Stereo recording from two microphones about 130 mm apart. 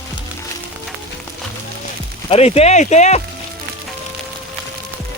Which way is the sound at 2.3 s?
55° left (ahead or behind).